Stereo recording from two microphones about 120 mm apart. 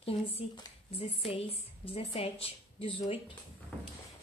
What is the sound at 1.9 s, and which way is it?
Speech, 55° left (ahead or behind).